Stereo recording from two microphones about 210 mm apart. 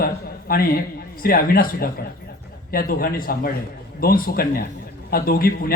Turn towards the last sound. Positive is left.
turn(degrees=45)  # may be behind; listen again after turning